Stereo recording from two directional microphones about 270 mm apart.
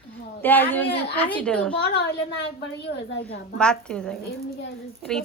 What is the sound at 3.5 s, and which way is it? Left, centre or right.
A woman's voice, centre.